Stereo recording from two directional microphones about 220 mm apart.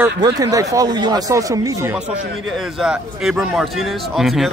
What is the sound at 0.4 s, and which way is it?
Speech, 15° right (ahead or behind).